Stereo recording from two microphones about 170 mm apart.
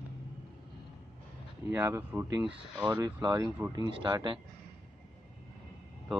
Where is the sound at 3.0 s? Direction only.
25° right (ahead or behind).